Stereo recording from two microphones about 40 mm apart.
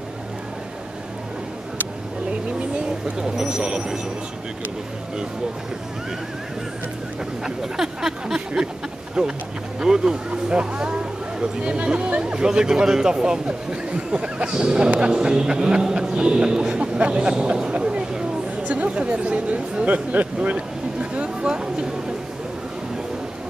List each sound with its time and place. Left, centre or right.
2.7 s speech: centre
7.4 s speech: centre
17.7 s a sound: right
18.6 s chatter: right
18.9 s a sound: right
20.4 s speech: right